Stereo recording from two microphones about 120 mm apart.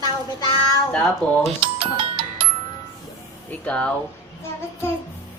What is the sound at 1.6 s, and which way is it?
Music, 45° right (ahead or behind).